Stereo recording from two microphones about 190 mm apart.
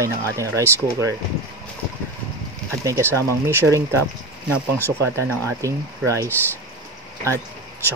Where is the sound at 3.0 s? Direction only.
10° left (ahead or behind).